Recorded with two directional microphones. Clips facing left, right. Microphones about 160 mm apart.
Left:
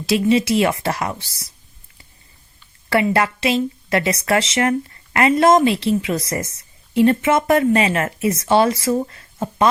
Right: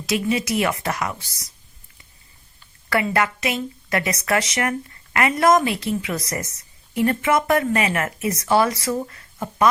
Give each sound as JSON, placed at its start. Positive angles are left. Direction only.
{"t": 0.0, "sound": "a woman's voice", "side_deg": 30}
{"t": 2.9, "sound": "a woman's voice", "side_deg": 25}